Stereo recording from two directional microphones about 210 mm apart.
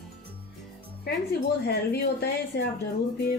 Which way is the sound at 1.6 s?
50° left (ahead or behind).